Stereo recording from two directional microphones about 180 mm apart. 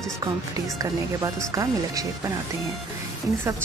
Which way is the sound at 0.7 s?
15° right (ahead or behind).